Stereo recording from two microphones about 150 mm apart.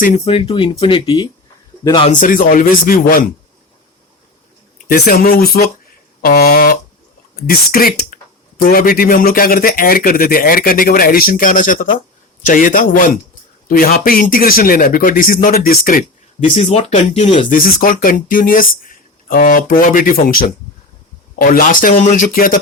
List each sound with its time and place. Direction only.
0.3 s speech: 40° left (ahead or behind)
2.0 s speech: 60° left (ahead or behind)
4.9 s a man's voice: 70° left (ahead or behind)
13.7 s a man's voice: 75° left (ahead or behind)
16.6 s speech: 50° left (ahead or behind)
17.5 s a man's voice: 70° left (ahead or behind)